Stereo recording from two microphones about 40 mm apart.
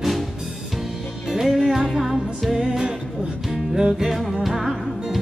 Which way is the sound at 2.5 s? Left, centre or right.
Centre.